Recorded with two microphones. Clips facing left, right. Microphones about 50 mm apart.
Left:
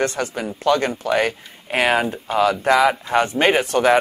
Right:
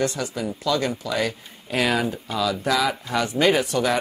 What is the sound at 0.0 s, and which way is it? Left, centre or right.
Speech, left.